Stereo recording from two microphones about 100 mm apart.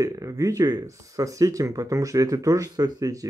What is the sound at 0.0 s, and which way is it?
Speech, 35° right (ahead or behind).